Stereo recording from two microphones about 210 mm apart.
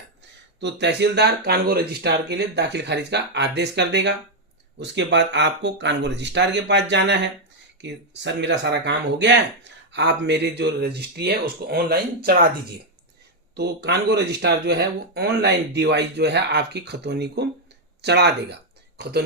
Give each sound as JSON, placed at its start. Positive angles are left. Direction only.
{"t": 0.6, "sound": "speech", "side_deg": -55}
{"t": 13.6, "sound": "speech", "side_deg": -50}